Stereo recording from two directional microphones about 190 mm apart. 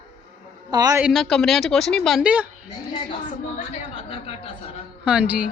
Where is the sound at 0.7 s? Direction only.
20° right (ahead or behind).